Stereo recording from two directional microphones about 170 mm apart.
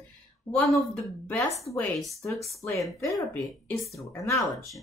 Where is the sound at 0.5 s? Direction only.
Centre (ahead or behind).